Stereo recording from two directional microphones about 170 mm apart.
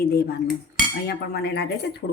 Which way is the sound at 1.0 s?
75° left (ahead or behind).